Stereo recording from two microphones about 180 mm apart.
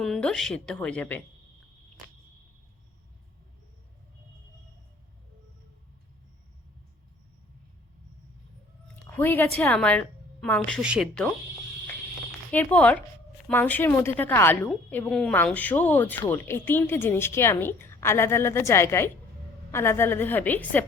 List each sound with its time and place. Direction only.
0.0 s a woman's voice: 5° left (ahead or behind)
9.0 s a woman's voice: 10° left (ahead or behind)
12.5 s a woman's voice: 10° left (ahead or behind)